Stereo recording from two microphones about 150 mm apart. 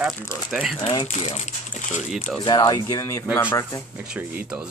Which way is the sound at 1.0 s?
50° left (ahead or behind).